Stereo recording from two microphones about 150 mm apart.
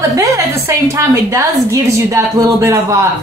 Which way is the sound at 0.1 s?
20° right (ahead or behind).